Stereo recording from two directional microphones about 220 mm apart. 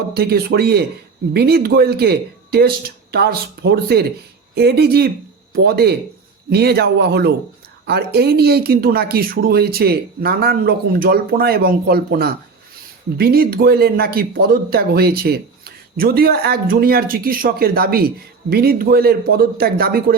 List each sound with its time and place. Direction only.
0.1 s speech: 45° right (ahead or behind)